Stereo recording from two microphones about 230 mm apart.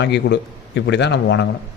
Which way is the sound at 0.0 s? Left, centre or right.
Left.